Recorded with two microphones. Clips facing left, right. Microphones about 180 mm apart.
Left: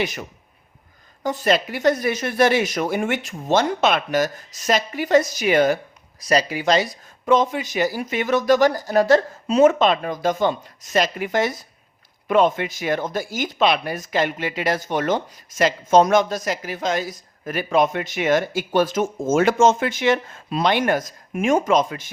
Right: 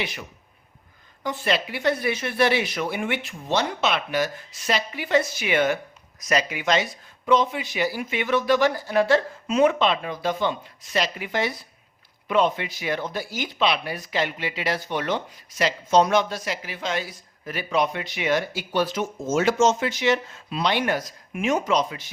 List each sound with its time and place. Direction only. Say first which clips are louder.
0.0 s speech: left 6 dB; 45° left (ahead or behind)